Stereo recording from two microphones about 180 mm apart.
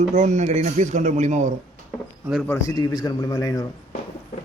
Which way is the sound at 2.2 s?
5° right (ahead or behind).